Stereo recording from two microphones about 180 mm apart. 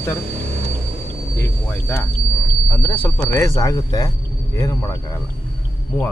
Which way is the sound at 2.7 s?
10° left (ahead or behind).